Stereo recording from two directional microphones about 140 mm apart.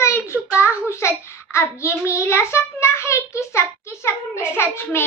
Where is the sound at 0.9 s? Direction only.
20° left (ahead or behind).